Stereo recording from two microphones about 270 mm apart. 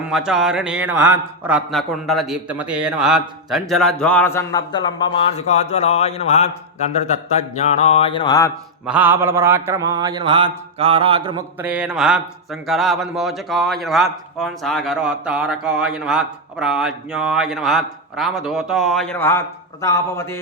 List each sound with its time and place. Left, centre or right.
0.1 s speech: centre; by 6.5 s left
7.6 s speech: left
8.9 s mantra: centre
11.6 s speech: centre